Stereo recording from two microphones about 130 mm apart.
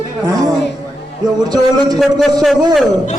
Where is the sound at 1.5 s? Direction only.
30° right (ahead or behind).